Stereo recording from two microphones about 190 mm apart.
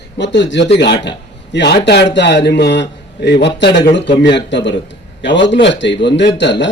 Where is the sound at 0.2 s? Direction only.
70° left (ahead or behind).